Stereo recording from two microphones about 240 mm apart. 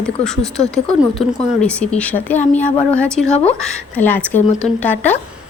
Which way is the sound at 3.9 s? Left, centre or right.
Centre.